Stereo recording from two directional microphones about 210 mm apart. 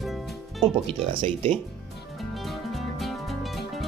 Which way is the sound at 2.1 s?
Centre (ahead or behind).